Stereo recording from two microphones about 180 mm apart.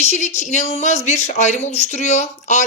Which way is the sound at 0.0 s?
40° left (ahead or behind).